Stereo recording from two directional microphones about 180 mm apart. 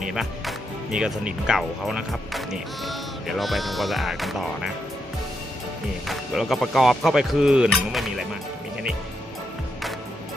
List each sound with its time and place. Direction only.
0.0 s speech: centre (ahead or behind)
6.1 s speech: centre (ahead or behind)